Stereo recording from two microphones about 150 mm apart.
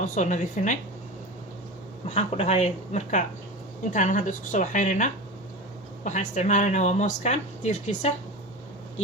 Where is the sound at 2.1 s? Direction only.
45° left (ahead or behind).